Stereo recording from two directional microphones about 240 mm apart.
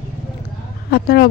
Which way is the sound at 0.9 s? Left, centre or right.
Left.